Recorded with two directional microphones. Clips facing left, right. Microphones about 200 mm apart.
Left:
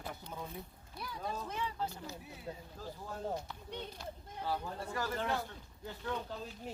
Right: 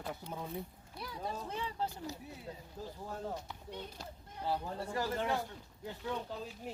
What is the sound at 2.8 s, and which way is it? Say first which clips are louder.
Speech: right 5 dB; 20° right (ahead or behind).